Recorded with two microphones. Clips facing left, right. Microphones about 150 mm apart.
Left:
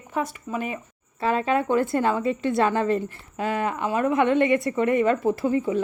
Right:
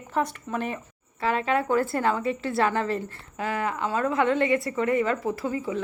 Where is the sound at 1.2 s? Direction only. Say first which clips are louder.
Left 2 dB; 25° left (ahead or behind).